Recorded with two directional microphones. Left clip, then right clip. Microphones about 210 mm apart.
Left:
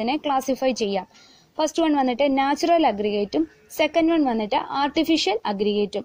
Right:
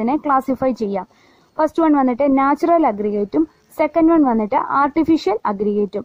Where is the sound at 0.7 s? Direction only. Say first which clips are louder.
Right 2 dB; 50° right (ahead or behind).